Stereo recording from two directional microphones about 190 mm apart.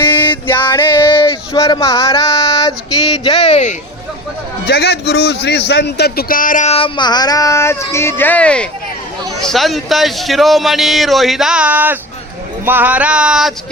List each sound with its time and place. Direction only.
0.0 s male singing: 10° left (ahead or behind)
3.2 s a man's voice: 30° left (ahead or behind)
4.6 s a man's voice: 60° left (ahead or behind); by 13.5 s 5° right (ahead or behind)